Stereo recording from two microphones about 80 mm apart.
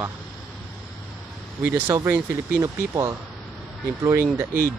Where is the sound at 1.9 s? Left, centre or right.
Right.